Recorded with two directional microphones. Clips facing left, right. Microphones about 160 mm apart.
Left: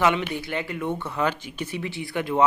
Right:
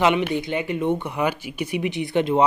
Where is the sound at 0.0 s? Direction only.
20° right (ahead or behind).